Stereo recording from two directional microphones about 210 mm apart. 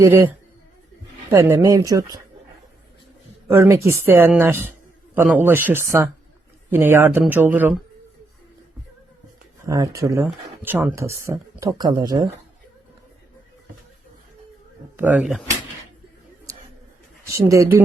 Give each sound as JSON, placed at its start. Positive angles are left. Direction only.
{"t": 0.0, "sound": "a woman's voice", "side_deg": -15}
{"t": 1.3, "sound": "a woman's voice", "side_deg": -15}
{"t": 3.4, "sound": "a woman's voice", "side_deg": -10}
{"t": 9.6, "sound": "a woman's voice", "side_deg": -15}
{"t": 14.9, "sound": "speech", "side_deg": -5}
{"t": 17.3, "sound": "a woman's voice", "side_deg": -15}